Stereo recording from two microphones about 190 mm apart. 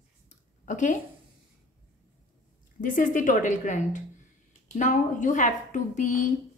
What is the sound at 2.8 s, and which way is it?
A woman's voice, 45° left (ahead or behind).